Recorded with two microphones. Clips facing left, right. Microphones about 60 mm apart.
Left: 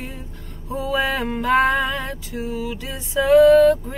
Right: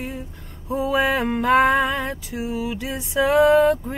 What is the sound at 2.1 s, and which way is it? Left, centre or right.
Speech, centre.